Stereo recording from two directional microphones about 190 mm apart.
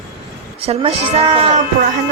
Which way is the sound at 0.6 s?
30° right (ahead or behind).